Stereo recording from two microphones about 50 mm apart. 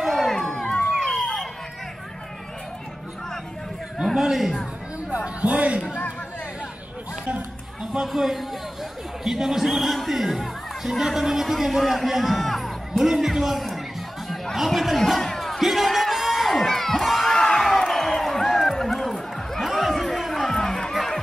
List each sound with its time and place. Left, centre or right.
0.1 s crowd: centre
0.9 s a sound: centre
4.0 s a man's voice: centre
5.1 s music: right
7.8 s a sound: centre
8.1 s speech: centre
14.3 s music: centre
15.6 s crowd: centre
17.4 s crowd: centre
17.6 s a sound: centre
20.5 s a sound: centre
20.9 s music: centre